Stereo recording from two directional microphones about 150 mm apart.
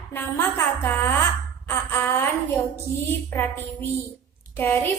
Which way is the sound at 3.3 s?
15° left (ahead or behind).